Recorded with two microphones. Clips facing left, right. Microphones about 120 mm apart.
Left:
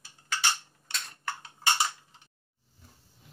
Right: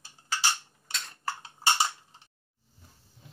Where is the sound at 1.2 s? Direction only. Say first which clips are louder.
Right 3 dB; 30° right (ahead or behind).